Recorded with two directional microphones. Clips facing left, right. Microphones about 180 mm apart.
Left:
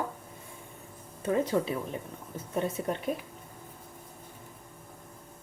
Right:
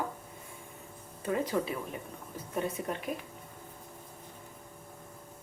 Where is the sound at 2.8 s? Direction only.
30° left (ahead or behind).